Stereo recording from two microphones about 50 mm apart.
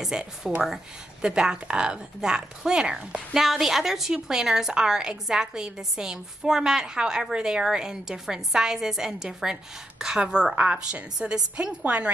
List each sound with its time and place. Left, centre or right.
0.4 s a woman's voice: centre
3.3 s a woman's voice: centre; by 12.1 s right